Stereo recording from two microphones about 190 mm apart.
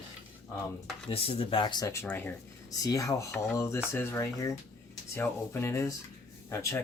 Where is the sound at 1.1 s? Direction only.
30° left (ahead or behind).